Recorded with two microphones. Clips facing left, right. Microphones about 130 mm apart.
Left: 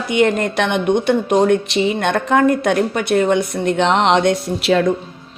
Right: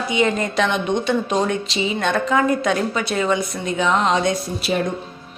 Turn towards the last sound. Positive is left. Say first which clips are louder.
# left 6 dB
turn(degrees=90)